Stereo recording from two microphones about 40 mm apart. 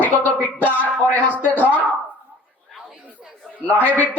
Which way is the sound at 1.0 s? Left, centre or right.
Left.